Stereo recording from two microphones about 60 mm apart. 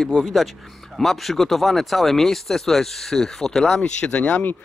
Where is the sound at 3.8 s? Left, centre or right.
Left.